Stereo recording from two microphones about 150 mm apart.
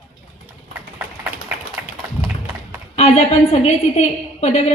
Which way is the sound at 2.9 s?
45° left (ahead or behind).